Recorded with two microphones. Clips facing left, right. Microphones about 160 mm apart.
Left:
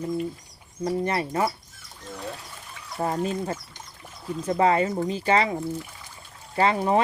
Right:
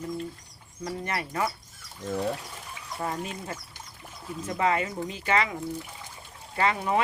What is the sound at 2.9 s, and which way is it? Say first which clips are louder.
Speech: left 7 dB; 35° left (ahead or behind).